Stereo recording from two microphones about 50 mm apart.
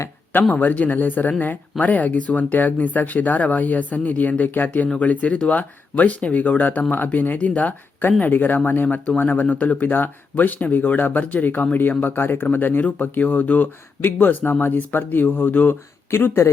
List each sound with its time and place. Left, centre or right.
0.5 s speech: left
9.4 s speech: left
16.0 s speech: left